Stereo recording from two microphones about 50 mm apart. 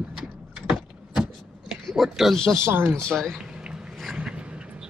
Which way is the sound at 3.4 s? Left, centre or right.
Centre.